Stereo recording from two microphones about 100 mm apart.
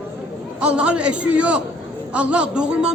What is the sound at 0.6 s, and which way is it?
A man's voice, 10° right (ahead or behind).